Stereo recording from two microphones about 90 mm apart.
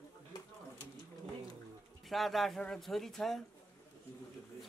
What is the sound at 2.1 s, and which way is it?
Speech, centre (ahead or behind).